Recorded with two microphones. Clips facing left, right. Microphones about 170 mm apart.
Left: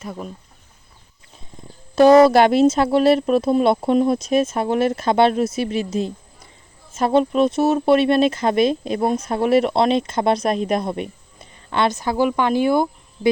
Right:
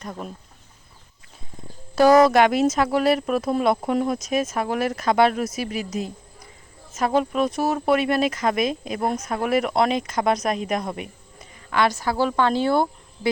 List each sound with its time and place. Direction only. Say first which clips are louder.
0.0 s speech: left 2 dB; 5° left (ahead or behind)
2.0 s speech: left 4 dB; 25° left (ahead or behind)